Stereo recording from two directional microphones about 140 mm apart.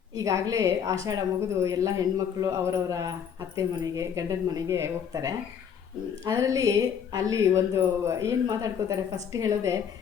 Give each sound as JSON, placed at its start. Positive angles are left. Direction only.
{"t": 0.2, "sound": "a man's voice", "side_deg": -25}